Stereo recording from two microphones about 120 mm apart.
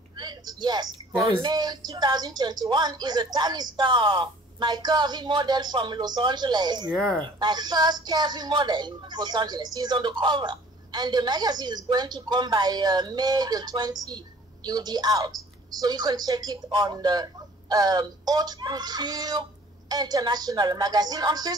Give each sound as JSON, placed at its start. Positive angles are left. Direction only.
{"t": 0.2, "sound": "a sound", "side_deg": -35}
{"t": 1.2, "sound": "a woman's voice", "side_deg": -45}
{"t": 6.9, "sound": "speech", "side_deg": 10}
{"t": 7.3, "sound": "a woman's voice", "side_deg": -35}